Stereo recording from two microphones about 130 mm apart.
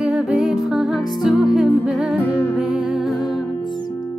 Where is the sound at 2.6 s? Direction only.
5° right (ahead or behind).